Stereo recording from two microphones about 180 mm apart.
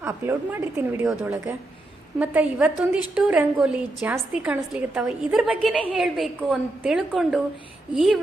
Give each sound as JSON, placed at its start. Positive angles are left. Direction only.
{"t": 0.0, "sound": "a woman's voice", "side_deg": -10}